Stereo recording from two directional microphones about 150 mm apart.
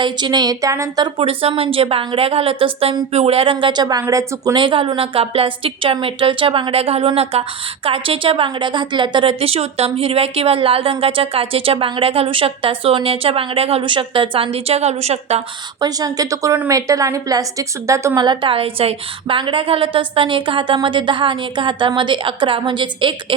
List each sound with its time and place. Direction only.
0.0 s a woman's voice: 30° right (ahead or behind); by 15.4 s 45° right (ahead or behind)
15.8 s a woman's voice: 25° right (ahead or behind)